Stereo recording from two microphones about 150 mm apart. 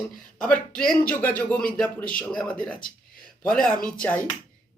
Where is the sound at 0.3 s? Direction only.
5° left (ahead or behind).